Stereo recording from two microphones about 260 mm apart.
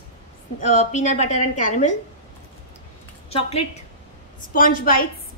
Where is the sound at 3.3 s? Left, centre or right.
Left.